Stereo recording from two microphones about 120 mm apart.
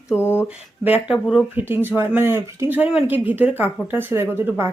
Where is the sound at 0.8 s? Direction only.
15° right (ahead or behind).